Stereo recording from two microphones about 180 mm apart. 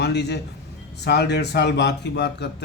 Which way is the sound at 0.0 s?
65° left (ahead or behind).